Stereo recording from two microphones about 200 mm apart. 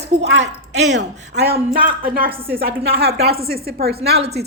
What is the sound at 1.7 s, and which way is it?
A woman's voice, 45° right (ahead or behind).